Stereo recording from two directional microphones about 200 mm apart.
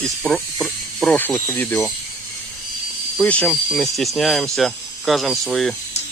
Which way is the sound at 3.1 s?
5° left (ahead or behind).